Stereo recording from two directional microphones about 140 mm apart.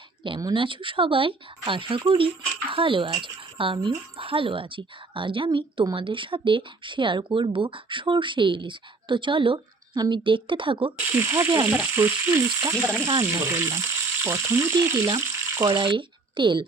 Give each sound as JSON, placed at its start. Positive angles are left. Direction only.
{"t": 0.2, "sound": "speech", "side_deg": -30}
{"t": 10.9, "sound": "frying", "side_deg": -20}
{"t": 15.7, "sound": "speech", "side_deg": -35}